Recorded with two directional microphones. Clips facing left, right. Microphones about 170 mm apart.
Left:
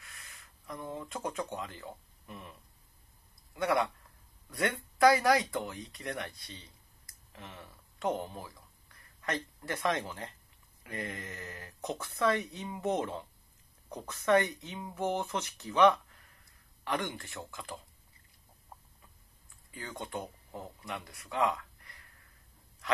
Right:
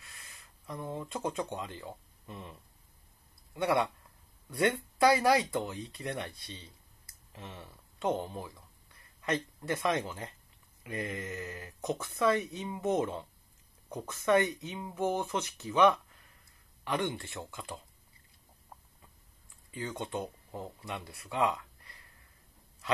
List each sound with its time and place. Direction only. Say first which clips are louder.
0.0 s speech: even; 25° right (ahead or behind)
3.5 s speech: right 1 dB; 25° right (ahead or behind)
19.7 s speech: right 3 dB; 25° right (ahead or behind)